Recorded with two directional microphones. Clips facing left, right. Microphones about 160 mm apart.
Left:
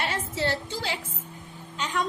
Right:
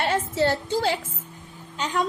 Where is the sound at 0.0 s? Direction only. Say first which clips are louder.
Right 6 dB; 50° right (ahead or behind).